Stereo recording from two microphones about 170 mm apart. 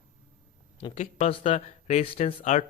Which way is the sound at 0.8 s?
40° left (ahead or behind).